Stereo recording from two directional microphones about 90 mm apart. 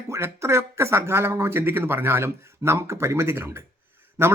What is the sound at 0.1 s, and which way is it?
Speech, 30° right (ahead or behind).